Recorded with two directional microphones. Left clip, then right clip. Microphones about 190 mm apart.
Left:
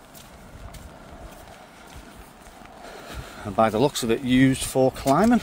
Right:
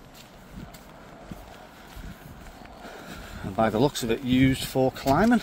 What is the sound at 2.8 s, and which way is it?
Speech, 25° left (ahead or behind).